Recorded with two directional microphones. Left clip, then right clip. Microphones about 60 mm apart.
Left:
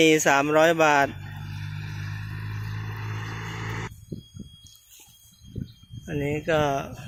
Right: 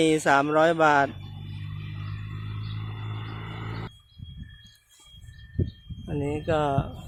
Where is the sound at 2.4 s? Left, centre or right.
Centre.